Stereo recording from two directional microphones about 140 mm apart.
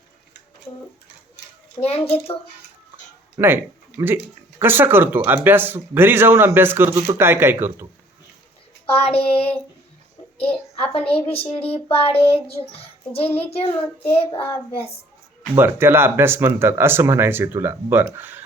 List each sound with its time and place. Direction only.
2.0 s a child's voice: 10° left (ahead or behind)
3.3 s speech: 15° right (ahead or behind)
8.9 s child singing: 45° left (ahead or behind)
10.3 s a sound: 40° left (ahead or behind)
10.9 s child singing: 45° left (ahead or behind)
15.5 s speech: 15° right (ahead or behind)